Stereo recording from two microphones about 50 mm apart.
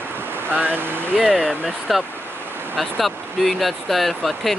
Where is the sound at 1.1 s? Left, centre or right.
Centre.